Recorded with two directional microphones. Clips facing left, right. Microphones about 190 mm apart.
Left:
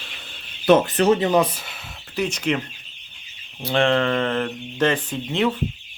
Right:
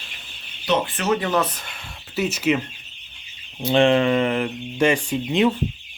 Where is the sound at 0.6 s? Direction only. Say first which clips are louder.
Left 7 dB; 50° left (ahead or behind); by 1.3 s 30° left (ahead or behind).